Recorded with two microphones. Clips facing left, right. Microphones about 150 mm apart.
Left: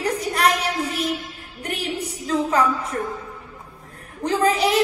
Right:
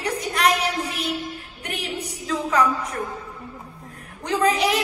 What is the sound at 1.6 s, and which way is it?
Speech, 35° left (ahead or behind).